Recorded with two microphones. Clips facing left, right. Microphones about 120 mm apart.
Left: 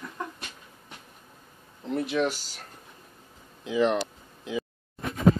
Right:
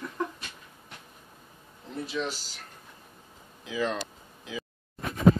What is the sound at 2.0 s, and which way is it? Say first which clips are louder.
Speech: left 5 dB; 60° left (ahead or behind).